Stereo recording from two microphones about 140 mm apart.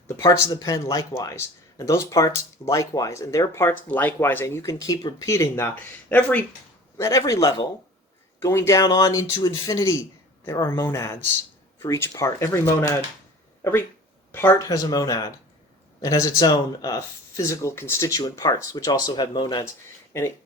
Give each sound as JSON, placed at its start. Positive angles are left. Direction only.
{"t": 0.2, "sound": "speech", "side_deg": 20}
{"t": 6.9, "sound": "speech", "side_deg": 20}
{"t": 14.3, "sound": "speech", "side_deg": 15}